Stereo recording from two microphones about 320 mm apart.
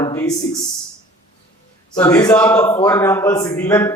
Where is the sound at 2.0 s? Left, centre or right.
Centre.